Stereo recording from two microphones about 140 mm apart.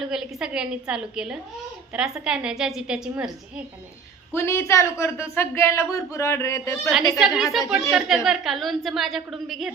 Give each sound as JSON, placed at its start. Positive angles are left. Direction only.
{"t": 0.1, "sound": "a woman's voice", "side_deg": -5}
{"t": 4.4, "sound": "speech", "side_deg": 20}
{"t": 7.2, "sound": "a woman's voice", "side_deg": 0}